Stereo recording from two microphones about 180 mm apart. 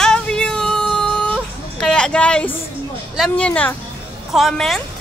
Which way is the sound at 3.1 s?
5° left (ahead or behind).